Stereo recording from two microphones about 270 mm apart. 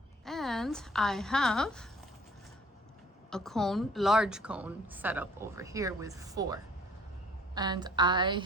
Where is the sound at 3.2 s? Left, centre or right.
Centre.